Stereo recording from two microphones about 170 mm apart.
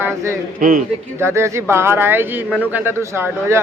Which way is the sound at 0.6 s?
55° right (ahead or behind).